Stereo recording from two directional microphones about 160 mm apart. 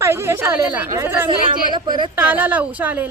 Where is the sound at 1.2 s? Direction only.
30° right (ahead or behind).